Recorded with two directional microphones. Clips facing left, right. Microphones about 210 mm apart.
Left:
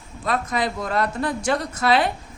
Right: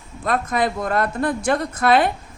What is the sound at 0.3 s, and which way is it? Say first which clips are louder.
A woman's voice: right 3 dB; 55° right (ahead or behind).